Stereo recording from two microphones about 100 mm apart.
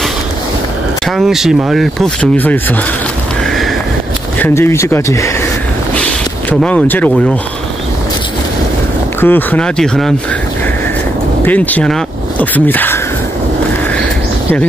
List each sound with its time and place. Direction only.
1.1 s speech: 5° right (ahead or behind)
2.3 s speech: 20° left (ahead or behind)
4.4 s speech: 25° left (ahead or behind)
5.9 s a sound: 10° left (ahead or behind)
9.2 s speech: 20° left (ahead or behind)
9.8 s speech: 5° left (ahead or behind)
11.4 s speech: 15° left (ahead or behind)